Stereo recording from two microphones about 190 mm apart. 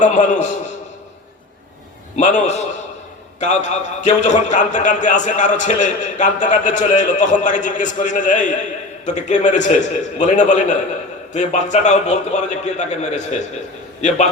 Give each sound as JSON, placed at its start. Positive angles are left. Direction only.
{"t": 0.0, "sound": "a man's voice", "side_deg": 40}
{"t": 2.1, "sound": "a man's voice", "side_deg": 40}